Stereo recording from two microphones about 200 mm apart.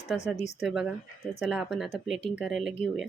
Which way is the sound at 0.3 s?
35° left (ahead or behind).